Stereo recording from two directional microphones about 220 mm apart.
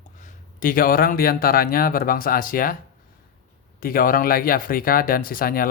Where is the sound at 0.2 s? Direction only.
40° left (ahead or behind).